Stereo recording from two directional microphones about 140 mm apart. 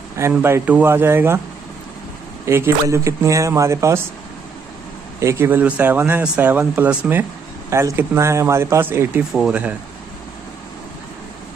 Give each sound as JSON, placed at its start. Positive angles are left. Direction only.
{"t": 0.3, "sound": "speech", "side_deg": -15}
{"t": 2.4, "sound": "speech", "side_deg": -20}
{"t": 5.2, "sound": "speech", "side_deg": -20}
{"t": 9.3, "sound": "speech", "side_deg": 0}